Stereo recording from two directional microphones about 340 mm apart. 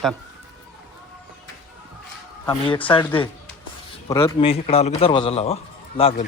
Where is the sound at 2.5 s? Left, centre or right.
Centre.